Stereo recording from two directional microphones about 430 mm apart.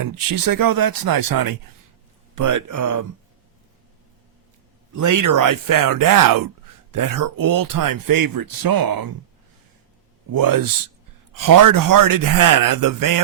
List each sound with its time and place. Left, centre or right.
0.0 s speech: right
4.9 s speech: right
10.3 s speech: right